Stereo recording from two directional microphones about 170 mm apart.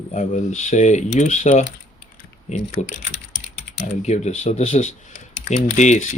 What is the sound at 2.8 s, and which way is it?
Speech, 45° left (ahead or behind).